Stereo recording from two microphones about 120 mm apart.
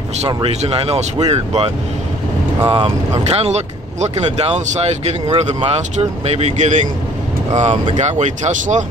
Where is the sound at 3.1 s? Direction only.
65° right (ahead or behind); by 6.9 s 85° right.